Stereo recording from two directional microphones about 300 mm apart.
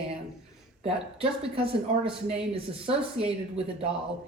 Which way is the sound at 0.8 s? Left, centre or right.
Centre.